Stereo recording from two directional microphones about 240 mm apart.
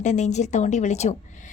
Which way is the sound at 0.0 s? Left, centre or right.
Left.